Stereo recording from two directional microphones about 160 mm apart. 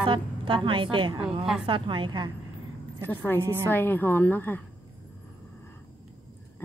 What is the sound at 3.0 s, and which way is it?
Speech, 10° left (ahead or behind).